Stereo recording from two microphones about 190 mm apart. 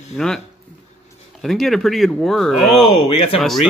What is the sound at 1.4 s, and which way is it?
Speech, centre (ahead or behind).